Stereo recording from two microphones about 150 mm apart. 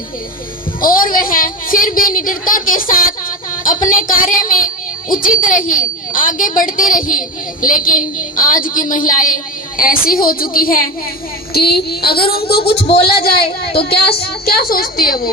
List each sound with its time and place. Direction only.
0.8 s a woman's voice: 70° left (ahead or behind)
11.5 s a woman's voice: 90° left